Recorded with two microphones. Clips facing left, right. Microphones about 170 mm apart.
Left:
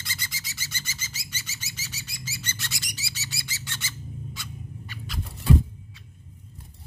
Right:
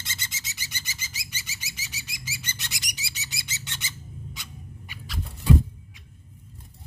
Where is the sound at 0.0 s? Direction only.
20° right (ahead or behind).